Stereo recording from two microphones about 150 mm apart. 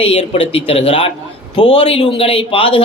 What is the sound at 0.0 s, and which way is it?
A man's voice, 40° left (ahead or behind).